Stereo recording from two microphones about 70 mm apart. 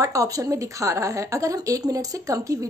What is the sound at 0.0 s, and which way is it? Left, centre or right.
A woman's voice, right.